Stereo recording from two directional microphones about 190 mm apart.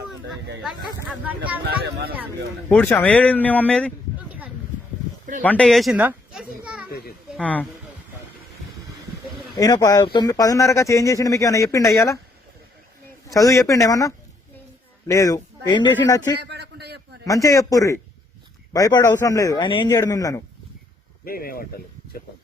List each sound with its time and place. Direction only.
1.0 s speech: 10° right (ahead or behind)
1.6 s speech: 55° right (ahead or behind)
2.6 s speech: 10° left (ahead or behind)
5.4 s a sound: 5° left (ahead or behind)
7.3 s speech: 5° left (ahead or behind)
9.6 s speech: 20° left (ahead or behind)
13.2 s speech: 20° left (ahead or behind)
16.4 s a sound: 60° right (ahead or behind)
17.2 s a man's voice: 15° left (ahead or behind)
21.2 s speech: 50° left (ahead or behind)